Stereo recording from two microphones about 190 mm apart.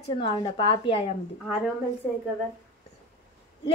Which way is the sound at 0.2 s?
25° left (ahead or behind).